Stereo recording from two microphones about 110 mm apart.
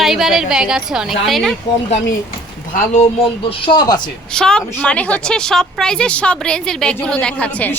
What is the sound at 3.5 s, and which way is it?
Speech, 50° left (ahead or behind).